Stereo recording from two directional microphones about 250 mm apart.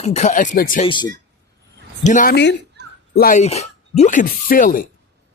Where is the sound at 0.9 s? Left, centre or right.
Centre.